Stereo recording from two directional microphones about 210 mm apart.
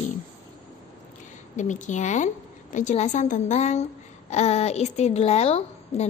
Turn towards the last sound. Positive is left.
turn(degrees=30)  # may be behind; listen again after turning